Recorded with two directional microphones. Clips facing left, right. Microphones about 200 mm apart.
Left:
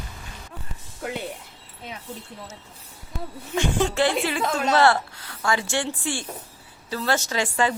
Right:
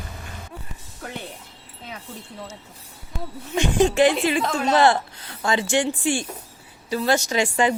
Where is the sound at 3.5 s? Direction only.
15° right (ahead or behind).